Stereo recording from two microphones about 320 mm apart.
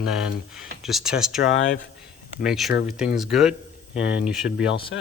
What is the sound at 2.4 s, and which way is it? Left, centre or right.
A man's voice, centre.